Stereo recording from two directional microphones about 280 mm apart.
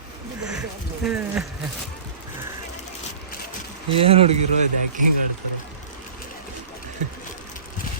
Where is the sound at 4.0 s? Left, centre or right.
Centre.